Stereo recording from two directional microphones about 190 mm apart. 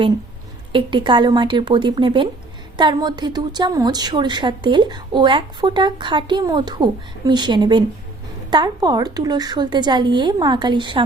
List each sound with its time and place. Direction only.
0.7 s a woman's voice: 25° right (ahead or behind)